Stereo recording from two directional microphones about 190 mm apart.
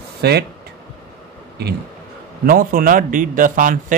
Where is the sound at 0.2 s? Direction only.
60° right (ahead or behind).